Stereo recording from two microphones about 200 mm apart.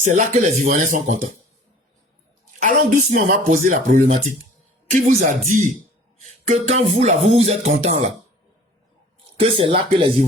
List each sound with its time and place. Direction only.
0.0 s speech: 40° right (ahead or behind)
2.6 s a sound: 40° right (ahead or behind)
3.2 s speech: 40° right (ahead or behind)
9.4 s speech: 25° right (ahead or behind)